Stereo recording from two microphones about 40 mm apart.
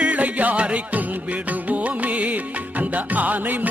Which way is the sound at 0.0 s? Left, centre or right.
Right.